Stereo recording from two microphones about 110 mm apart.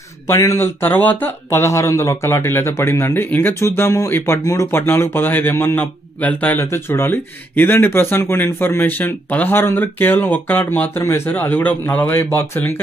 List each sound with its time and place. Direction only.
0.3 s speech: 25° left (ahead or behind)